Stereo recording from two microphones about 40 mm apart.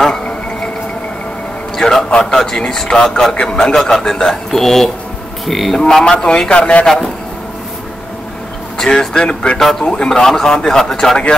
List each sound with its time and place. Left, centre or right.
0.1 s a sound: centre
1.8 s a man's voice: centre
3.3 s speech: left
3.6 s a man's voice: centre
5.8 s a man's voice: centre
8.7 s speech: centre
9.6 s a man's voice: centre